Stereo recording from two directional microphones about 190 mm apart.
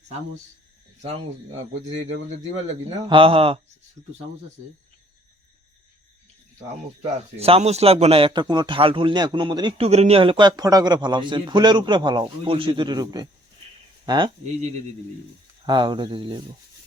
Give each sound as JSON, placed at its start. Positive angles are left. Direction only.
{"t": 1.9, "sound": "a man's voice", "side_deg": -35}
{"t": 7.0, "sound": "a man's voice", "side_deg": -35}
{"t": 15.6, "sound": "a man's voice", "side_deg": -25}